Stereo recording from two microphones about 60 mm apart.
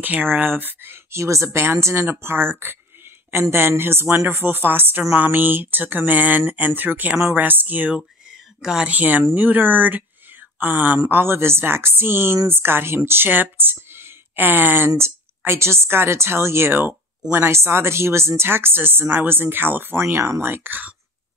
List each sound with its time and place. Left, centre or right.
0.0 s speech: right
1.1 s a woman's voice: right
15.0 s a woman's voice: right